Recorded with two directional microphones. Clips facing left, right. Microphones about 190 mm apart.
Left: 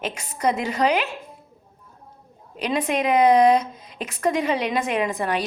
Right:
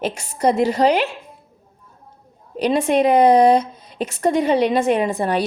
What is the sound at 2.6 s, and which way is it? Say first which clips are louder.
A woman's voice: right 7 dB; 30° right (ahead or behind).